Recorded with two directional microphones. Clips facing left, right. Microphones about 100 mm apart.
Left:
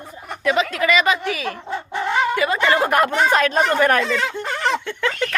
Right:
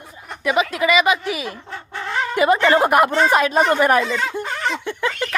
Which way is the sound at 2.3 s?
20° right (ahead or behind).